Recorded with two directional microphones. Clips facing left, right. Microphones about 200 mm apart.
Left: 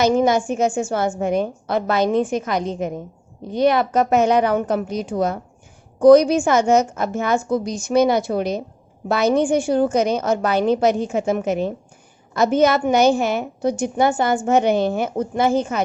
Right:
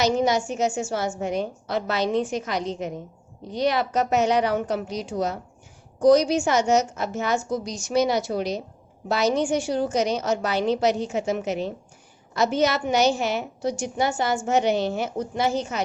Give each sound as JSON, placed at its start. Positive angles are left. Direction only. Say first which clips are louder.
{"t": 0.0, "sound": "a woman's voice", "louder": "left 5 dB", "side_deg": 50}